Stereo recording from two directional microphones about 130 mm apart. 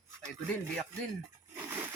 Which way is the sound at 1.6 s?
15° right (ahead or behind).